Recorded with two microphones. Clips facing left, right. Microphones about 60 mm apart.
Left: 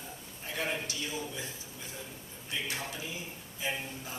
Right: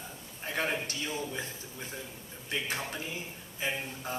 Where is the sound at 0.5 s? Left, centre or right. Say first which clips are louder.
Right 2 dB; right.